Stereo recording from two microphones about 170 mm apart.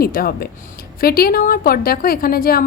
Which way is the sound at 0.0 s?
60° left (ahead or behind).